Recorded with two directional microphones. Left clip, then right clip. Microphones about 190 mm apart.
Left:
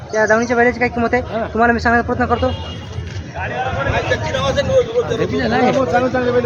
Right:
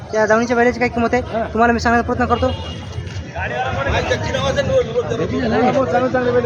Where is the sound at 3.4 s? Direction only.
60° right (ahead or behind).